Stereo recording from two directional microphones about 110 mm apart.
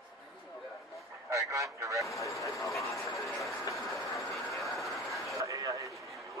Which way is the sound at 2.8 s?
Centre (ahead or behind).